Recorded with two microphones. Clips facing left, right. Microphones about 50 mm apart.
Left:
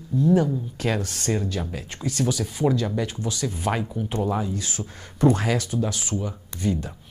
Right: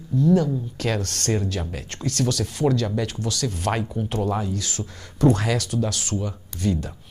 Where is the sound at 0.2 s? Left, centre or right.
Centre.